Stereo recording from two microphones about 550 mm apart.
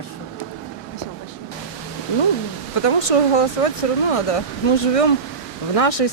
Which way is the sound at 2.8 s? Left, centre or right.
Left.